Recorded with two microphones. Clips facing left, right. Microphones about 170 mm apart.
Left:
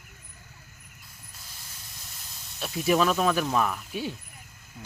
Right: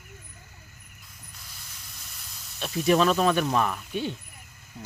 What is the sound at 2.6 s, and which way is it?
Speech, 5° left (ahead or behind).